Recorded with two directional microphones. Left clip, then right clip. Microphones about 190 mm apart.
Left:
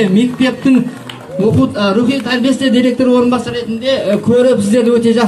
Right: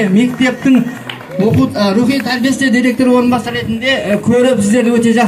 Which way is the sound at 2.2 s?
40° right (ahead or behind).